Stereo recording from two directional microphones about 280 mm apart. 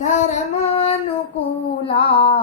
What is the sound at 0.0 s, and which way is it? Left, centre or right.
Female singing, left.